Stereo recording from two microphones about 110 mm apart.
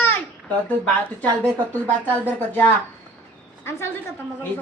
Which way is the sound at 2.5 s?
15° left (ahead or behind).